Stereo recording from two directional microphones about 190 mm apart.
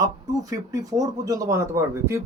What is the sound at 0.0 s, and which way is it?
Speech, 20° right (ahead or behind).